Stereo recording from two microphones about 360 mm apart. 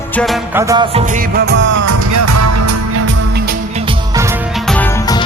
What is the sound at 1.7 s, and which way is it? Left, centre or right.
Music, right.